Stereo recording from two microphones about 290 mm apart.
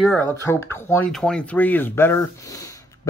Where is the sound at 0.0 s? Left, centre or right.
Centre.